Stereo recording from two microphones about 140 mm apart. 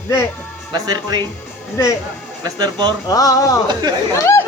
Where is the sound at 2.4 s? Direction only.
30° right (ahead or behind).